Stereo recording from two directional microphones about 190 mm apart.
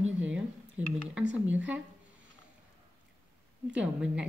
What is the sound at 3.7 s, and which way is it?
Speech, 5° right (ahead or behind).